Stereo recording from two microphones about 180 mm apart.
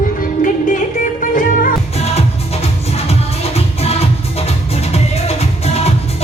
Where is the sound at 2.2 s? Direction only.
35° left (ahead or behind).